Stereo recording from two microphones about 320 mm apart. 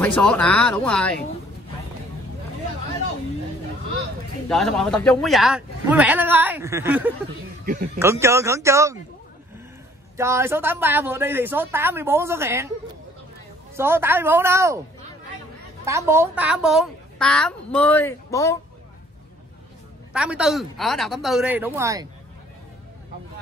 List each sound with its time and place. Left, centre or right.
0.0 s a woman's voice: centre
4.5 s a woman's voice: centre
7.6 s speech: right
8.0 s speech: centre
10.1 s speech: centre
13.7 s speech: centre
15.8 s a woman's voice: centre
20.1 s a woman's voice: centre